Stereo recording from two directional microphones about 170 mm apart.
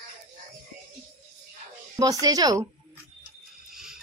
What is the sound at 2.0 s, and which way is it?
Speech, 20° right (ahead or behind).